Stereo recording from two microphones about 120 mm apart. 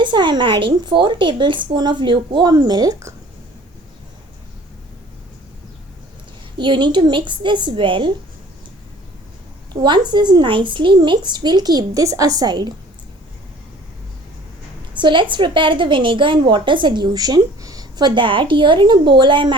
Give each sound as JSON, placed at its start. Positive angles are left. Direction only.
{"t": 0.0, "sound": "a woman's voice", "side_deg": -40}
{"t": 6.6, "sound": "a woman's voice", "side_deg": -40}
{"t": 9.8, "sound": "a woman's voice", "side_deg": -40}
{"t": 14.9, "sound": "a woman's voice", "side_deg": -40}